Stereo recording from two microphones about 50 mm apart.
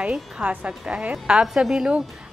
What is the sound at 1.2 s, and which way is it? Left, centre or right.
Speech, centre.